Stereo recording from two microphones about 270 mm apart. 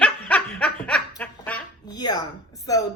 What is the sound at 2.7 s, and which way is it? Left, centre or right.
Speech, centre.